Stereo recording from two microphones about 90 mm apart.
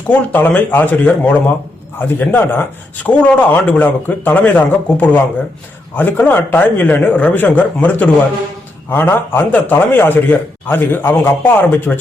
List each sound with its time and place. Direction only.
0.1 s a man's voice: 20° left (ahead or behind)